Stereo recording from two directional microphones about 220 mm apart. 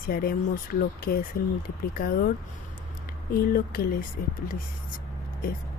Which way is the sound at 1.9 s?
40° left (ahead or behind).